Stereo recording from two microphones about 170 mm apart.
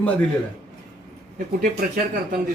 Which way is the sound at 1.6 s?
65° right (ahead or behind).